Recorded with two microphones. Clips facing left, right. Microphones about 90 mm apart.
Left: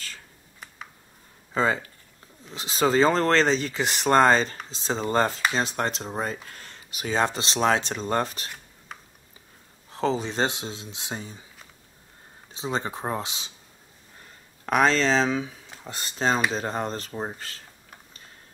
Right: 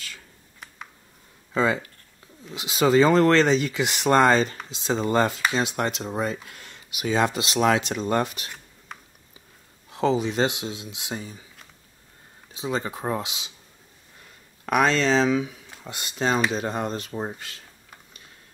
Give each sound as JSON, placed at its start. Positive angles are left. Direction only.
{"t": 1.5, "sound": "speech", "side_deg": 35}
{"t": 9.9, "sound": "speech", "side_deg": 35}
{"t": 12.5, "sound": "speech", "side_deg": 30}
{"t": 14.7, "sound": "speech", "side_deg": 35}